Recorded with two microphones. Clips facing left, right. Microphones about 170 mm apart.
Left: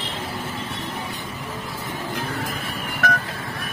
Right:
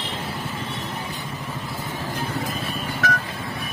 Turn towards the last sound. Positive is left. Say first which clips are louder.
# left 1 dB
turn(degrees=55)  # may be behind; listen again after turning